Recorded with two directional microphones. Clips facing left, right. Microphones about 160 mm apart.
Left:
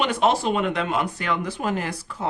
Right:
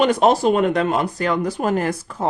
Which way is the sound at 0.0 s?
40° right (ahead or behind).